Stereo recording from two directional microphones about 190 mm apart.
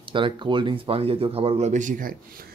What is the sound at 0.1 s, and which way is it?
Speech, 25° right (ahead or behind).